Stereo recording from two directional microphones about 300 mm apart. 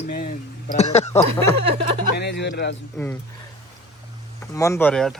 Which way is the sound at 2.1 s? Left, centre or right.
Left.